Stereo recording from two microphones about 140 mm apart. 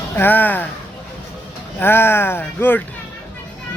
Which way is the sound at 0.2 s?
15° left (ahead or behind).